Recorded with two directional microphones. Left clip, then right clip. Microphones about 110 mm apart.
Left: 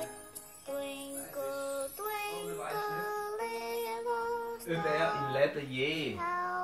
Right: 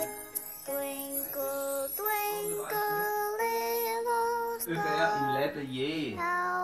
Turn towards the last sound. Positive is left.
turn(degrees=-35)  # may be behind; listen again after turning